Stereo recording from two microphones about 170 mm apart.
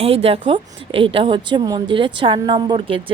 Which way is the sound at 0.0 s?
35° right (ahead or behind).